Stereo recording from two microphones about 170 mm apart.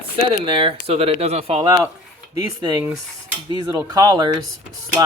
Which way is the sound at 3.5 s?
25° right (ahead or behind).